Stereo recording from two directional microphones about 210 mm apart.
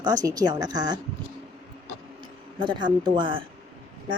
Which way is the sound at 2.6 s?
20° right (ahead or behind).